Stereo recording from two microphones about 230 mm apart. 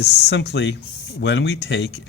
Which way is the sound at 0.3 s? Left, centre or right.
Left.